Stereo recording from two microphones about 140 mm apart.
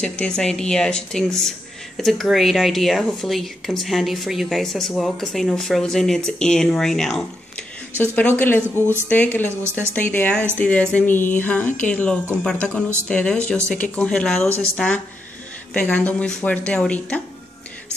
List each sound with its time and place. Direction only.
0.0 s speech: 5° left (ahead or behind)
9.5 s a woman's voice: 20° right (ahead or behind)
9.8 s speech: 10° left (ahead or behind)